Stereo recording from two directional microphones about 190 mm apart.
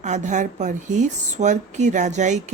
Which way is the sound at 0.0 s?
40° right (ahead or behind).